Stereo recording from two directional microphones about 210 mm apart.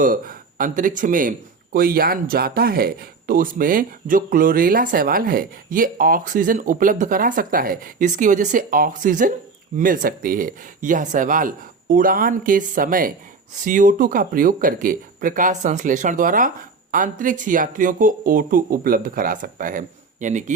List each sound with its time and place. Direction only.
0.0 s speech: 40° right (ahead or behind)